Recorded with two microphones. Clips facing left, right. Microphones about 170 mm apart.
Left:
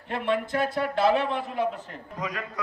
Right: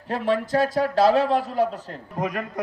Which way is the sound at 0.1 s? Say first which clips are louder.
Right 4 dB; 40° right (ahead or behind).